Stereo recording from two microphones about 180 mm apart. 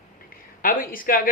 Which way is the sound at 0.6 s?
50° left (ahead or behind).